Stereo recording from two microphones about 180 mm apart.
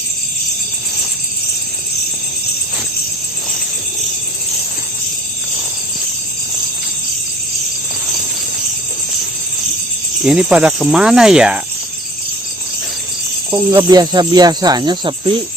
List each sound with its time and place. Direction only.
10.2 s cricket: 5° right (ahead or behind)
13.5 s speech: 15° right (ahead or behind)